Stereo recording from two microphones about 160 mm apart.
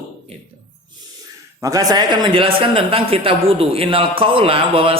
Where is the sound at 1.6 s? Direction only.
20° right (ahead or behind).